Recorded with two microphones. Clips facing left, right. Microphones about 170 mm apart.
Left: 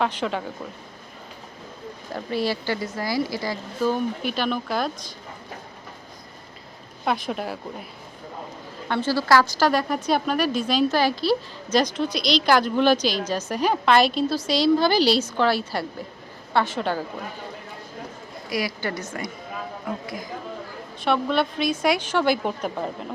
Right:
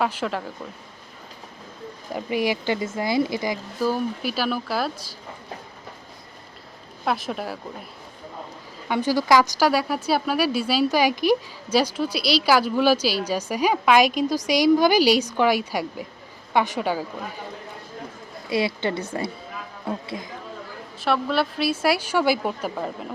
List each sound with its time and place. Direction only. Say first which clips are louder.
0.0 s a woman's voice: even; 5° right (ahead or behind)
2.1 s speech: right 2 dB; 15° right (ahead or behind)
3.8 s a woman's voice: left 2 dB; 5° right (ahead or behind)
7.0 s a woman's voice: even; centre (ahead or behind)
8.9 s a woman's voice: right 1 dB; 15° right (ahead or behind)
18.4 s speech: right 4 dB; 25° right (ahead or behind)
21.0 s a woman's voice: left 1 dB; centre (ahead or behind)